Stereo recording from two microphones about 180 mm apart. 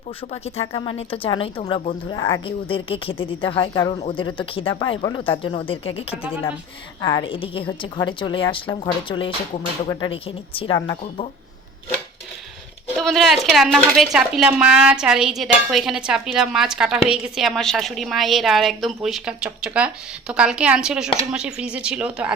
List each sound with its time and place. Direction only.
0.3 s a woman's voice: 35° left (ahead or behind)
2.0 s speech: 15° left (ahead or behind)
2.4 s speech: 30° left (ahead or behind)
7.0 s speech: 15° left (ahead or behind)
7.3 s a woman's voice: 30° left (ahead or behind)
13.0 s speech: centre (ahead or behind)